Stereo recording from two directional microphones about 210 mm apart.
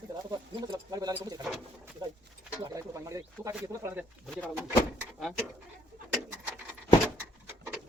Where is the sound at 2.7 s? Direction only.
15° right (ahead or behind).